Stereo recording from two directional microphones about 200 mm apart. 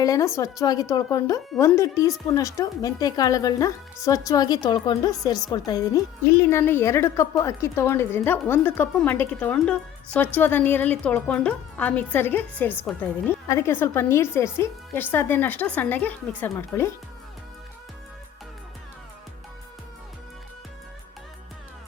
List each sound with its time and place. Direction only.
0.0 s a woman's voice: 15° left (ahead or behind)